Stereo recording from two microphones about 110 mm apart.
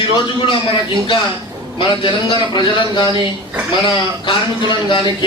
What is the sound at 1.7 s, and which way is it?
A man's voice, 45° left (ahead or behind).